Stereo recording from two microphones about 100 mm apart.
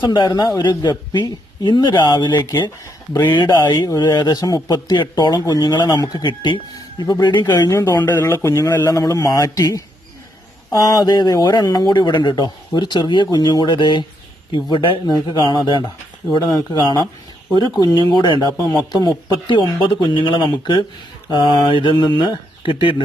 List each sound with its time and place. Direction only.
0.0 s speech: 50° left (ahead or behind)
7.7 s a man's voice: 30° left (ahead or behind); by 15.8 s 50° left (ahead or behind)
16.4 s speech: 35° left (ahead or behind)
18.1 s speech: 45° left (ahead or behind)